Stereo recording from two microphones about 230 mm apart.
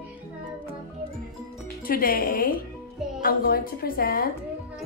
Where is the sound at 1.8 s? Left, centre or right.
Left.